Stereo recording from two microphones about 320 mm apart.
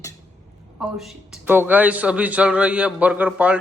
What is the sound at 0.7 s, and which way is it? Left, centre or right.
A man's voice, centre.